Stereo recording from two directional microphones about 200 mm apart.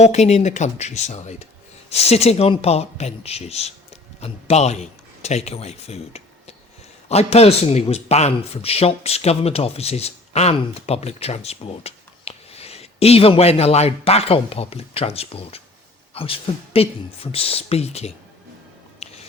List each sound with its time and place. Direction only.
0.0 s a man's voice: 35° left (ahead or behind)
19.0 s biting: 30° left (ahead or behind)